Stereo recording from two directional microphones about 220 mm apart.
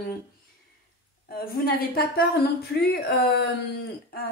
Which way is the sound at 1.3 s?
45° left (ahead or behind).